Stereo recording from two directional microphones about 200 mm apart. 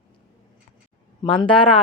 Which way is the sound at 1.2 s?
25° left (ahead or behind).